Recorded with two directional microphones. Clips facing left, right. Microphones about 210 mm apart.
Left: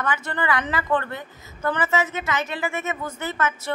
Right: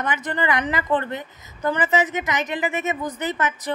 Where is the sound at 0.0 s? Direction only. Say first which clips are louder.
Right 2 dB; 20° right (ahead or behind).